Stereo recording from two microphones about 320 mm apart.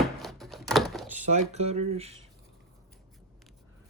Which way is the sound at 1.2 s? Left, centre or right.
Right.